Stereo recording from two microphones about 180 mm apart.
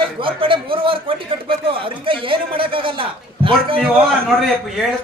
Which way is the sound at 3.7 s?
Centre (ahead or behind).